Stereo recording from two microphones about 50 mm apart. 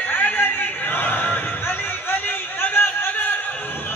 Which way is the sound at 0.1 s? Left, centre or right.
Left.